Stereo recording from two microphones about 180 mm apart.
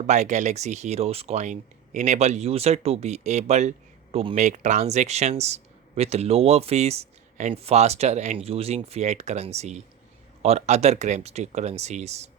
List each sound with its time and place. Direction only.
0.1 s speech: 40° right (ahead or behind)